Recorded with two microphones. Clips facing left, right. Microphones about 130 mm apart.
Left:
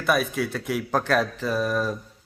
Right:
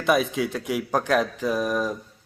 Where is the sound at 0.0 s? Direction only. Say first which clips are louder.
Right 2 dB; 20° right (ahead or behind).